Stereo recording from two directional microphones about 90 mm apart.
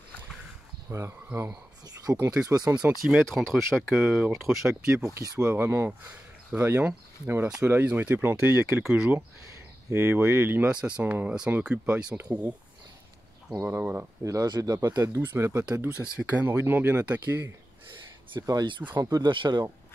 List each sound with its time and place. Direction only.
0.8 s speech: 30° right (ahead or behind)
2.7 s speech: 10° right (ahead or behind)
4.0 s speech: 10° right (ahead or behind)
5.0 s speech: 35° right (ahead or behind)
9.8 s speech: 25° right (ahead or behind); by 12.4 s 5° right (ahead or behind)
13.7 s speech: 20° right (ahead or behind)
14.2 s speech: 45° right (ahead or behind); by 17.5 s 25° right (ahead or behind)
18.4 s speech: 45° right (ahead or behind)